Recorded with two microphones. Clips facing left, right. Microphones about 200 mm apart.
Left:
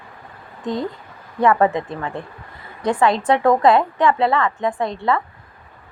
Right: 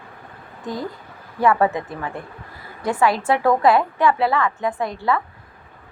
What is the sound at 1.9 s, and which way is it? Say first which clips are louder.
Speech: left 2 dB; 25° left (ahead or behind).